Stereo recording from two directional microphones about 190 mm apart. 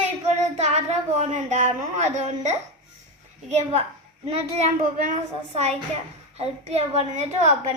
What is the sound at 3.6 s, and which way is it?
A woman's voice, 35° right (ahead or behind).